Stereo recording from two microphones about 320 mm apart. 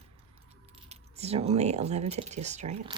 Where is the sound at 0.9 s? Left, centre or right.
Centre.